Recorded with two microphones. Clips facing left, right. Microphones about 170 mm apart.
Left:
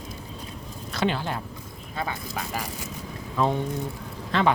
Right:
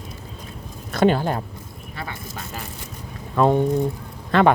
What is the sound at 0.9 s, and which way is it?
Speech, 50° right (ahead or behind).